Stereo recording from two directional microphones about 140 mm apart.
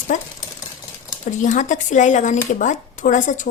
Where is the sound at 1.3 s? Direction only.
60° left (ahead or behind).